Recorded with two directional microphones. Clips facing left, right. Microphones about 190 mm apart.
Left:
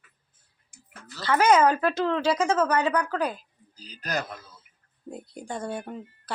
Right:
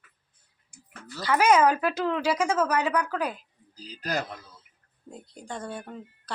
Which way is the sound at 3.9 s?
30° right (ahead or behind).